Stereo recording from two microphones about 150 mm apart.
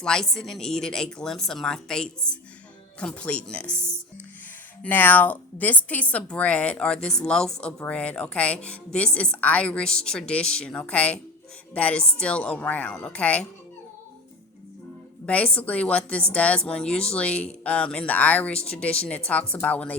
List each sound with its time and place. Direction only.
0.0 s a woman's voice: 5° left (ahead or behind)
3.8 s speech: 15° right (ahead or behind)
4.8 s a woman's voice: 10° left (ahead or behind)
15.3 s a woman's voice: 10° left (ahead or behind)